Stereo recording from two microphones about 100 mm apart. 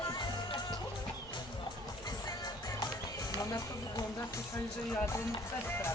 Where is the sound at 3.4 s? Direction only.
35° left (ahead or behind).